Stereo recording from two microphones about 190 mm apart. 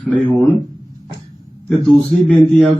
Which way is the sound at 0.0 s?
5° left (ahead or behind).